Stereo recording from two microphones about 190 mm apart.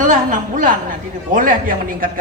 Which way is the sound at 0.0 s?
45° right (ahead or behind).